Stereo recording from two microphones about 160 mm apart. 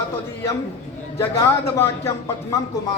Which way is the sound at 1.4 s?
15° left (ahead or behind).